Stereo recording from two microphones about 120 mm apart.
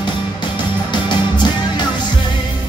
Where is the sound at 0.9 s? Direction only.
40° left (ahead or behind).